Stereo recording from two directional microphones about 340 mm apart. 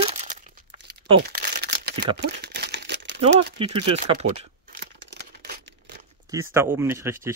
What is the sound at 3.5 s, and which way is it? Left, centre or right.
Speech, centre.